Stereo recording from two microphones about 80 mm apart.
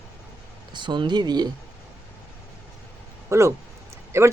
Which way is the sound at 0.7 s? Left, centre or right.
Right.